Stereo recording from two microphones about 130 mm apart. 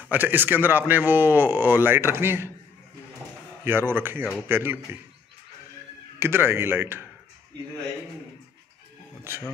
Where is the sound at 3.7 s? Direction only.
15° right (ahead or behind).